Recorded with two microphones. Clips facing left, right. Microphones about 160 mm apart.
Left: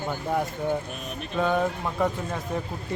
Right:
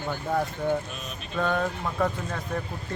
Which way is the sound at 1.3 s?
10° left (ahead or behind).